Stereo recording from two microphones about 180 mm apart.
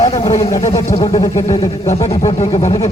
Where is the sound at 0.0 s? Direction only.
25° left (ahead or behind).